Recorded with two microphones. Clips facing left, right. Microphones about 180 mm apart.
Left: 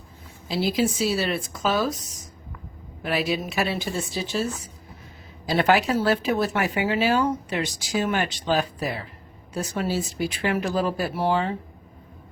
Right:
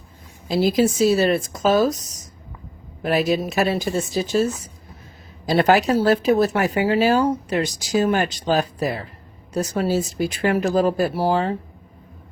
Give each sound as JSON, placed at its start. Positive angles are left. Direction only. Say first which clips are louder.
{"t": 0.4, "sound": "speech", "louder": "right 5 dB", "side_deg": -45}
{"t": 3.0, "sound": "speech", "louder": "right 6 dB", "side_deg": -45}